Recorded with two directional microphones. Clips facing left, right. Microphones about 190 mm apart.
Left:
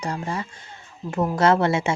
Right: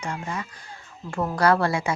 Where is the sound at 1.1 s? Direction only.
20° left (ahead or behind).